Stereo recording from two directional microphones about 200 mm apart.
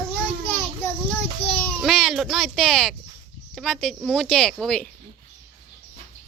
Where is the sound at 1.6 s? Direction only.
Centre (ahead or behind).